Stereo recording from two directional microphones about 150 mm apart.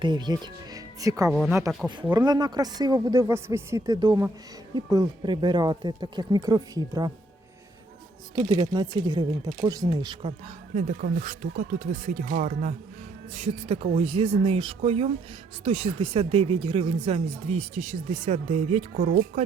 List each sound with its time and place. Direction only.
0.0 s speech: 30° right (ahead or behind)
1.3 s a woman's voice: 5° right (ahead or behind)
2.1 s speech: 25° right (ahead or behind)
8.4 s speech: 40° right (ahead or behind)
8.6 s speech: 25° right (ahead or behind)
10.8 s speech: 60° right (ahead or behind)
13.3 s speech: 45° right (ahead or behind); by 19.4 s 65° right (ahead or behind)